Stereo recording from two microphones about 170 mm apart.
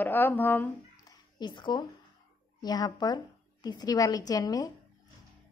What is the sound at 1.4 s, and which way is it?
A woman's voice, 25° left (ahead or behind).